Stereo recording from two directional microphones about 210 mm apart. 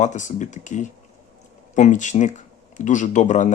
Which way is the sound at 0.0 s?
35° left (ahead or behind).